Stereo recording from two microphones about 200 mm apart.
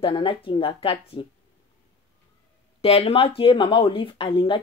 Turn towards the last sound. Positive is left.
turn(degrees=25)  # may be behind; listen again after turning